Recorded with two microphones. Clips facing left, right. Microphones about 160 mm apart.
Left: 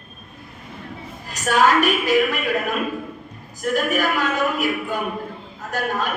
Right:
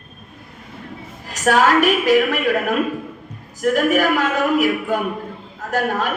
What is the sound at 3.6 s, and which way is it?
Speech, 80° right.